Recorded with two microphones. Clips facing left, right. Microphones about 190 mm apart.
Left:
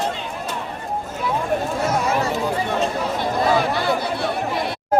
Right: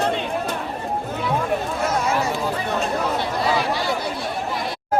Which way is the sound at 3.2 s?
50° left (ahead or behind).